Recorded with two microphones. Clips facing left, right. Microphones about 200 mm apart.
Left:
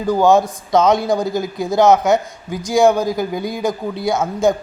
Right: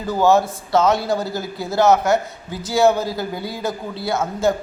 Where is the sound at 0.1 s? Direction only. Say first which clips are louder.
Left 3 dB; 15° left (ahead or behind).